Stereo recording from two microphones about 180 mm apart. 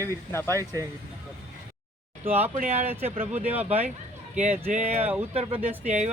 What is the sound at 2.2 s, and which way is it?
Speech, 10° right (ahead or behind).